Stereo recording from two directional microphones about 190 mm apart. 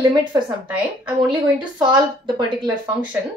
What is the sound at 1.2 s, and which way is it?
Speech, 25° right (ahead or behind).